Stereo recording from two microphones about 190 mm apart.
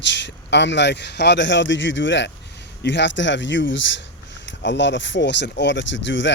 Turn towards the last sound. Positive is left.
turn(degrees=75)  # may be behind; listen again after turning